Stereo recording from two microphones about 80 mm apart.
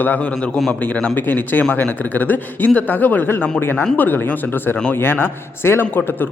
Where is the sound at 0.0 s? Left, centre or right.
Left.